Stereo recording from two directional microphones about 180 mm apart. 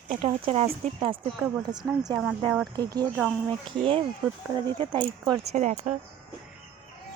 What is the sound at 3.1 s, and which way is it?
Speech, centre (ahead or behind).